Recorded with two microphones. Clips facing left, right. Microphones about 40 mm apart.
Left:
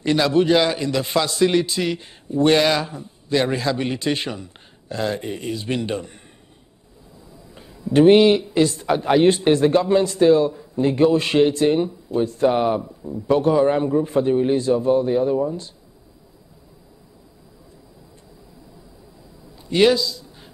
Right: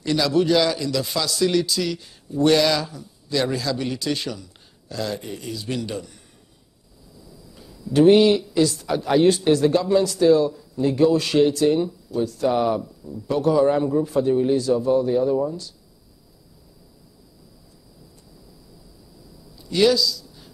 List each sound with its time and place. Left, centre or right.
0.0 s a man's voice: left
7.2 s a man's voice: left
19.5 s a sound: left